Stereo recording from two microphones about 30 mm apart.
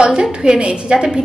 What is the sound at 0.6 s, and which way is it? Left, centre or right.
Speech, right.